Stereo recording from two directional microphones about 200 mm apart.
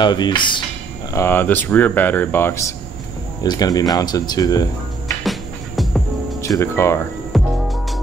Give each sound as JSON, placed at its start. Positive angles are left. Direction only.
{"t": 0.0, "sound": "speech", "side_deg": 20}
{"t": 1.1, "sound": "speech", "side_deg": 10}
{"t": 5.2, "sound": "music", "side_deg": 0}
{"t": 6.4, "sound": "speech", "side_deg": 15}
{"t": 7.3, "sound": "music", "side_deg": 0}